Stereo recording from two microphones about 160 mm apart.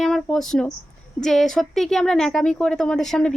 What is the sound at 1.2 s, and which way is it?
Speech, centre (ahead or behind).